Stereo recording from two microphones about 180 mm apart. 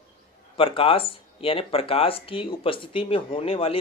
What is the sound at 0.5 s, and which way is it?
Speech, 30° left (ahead or behind).